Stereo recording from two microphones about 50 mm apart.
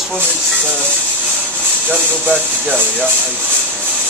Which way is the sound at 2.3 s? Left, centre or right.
Centre.